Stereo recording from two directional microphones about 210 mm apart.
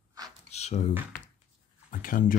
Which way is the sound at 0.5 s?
30° left (ahead or behind).